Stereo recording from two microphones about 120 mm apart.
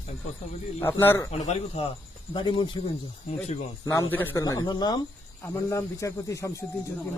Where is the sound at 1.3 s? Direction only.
65° left (ahead or behind).